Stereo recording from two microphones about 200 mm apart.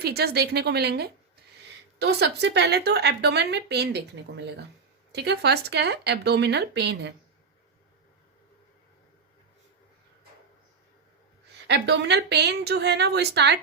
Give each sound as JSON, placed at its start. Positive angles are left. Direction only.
{"t": 0.0, "sound": "a woman's voice", "side_deg": -55}
{"t": 11.5, "sound": "a woman's voice", "side_deg": -60}